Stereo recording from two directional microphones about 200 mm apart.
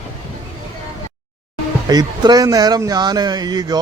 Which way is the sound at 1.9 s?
20° right (ahead or behind).